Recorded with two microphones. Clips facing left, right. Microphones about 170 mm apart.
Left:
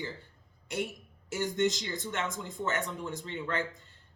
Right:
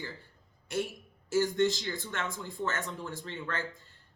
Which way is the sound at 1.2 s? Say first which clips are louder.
Right 3 dB; 20° left (ahead or behind).